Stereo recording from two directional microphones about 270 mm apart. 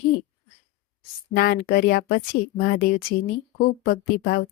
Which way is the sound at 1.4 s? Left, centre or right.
Left.